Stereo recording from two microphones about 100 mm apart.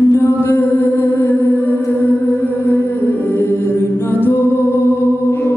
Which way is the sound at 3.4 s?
25° left (ahead or behind).